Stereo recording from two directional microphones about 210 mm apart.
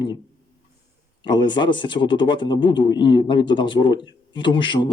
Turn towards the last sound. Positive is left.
turn(degrees=20)  # may be behind; listen again after turning